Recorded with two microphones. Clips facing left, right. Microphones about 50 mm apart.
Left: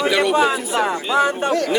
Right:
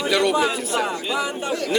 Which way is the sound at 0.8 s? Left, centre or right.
Left.